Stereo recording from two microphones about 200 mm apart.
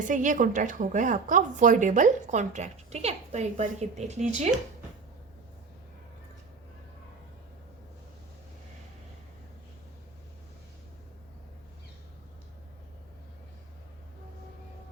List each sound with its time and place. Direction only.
0.1 s a woman's voice: 40° right (ahead or behind)